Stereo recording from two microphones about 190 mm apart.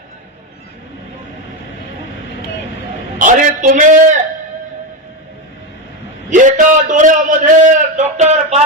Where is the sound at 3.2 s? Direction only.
40° right (ahead or behind).